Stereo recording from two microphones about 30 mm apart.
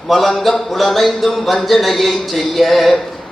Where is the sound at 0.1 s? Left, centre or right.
Centre.